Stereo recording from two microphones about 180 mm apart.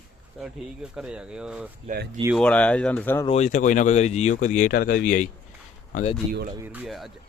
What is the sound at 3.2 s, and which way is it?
Speech, 40° left (ahead or behind).